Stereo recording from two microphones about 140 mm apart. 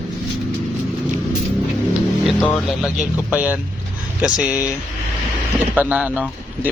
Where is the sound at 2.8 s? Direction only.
5° right (ahead or behind).